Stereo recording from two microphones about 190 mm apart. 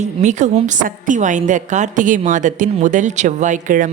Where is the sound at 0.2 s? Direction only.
40° right (ahead or behind).